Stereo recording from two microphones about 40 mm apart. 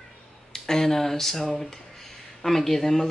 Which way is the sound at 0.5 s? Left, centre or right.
Centre.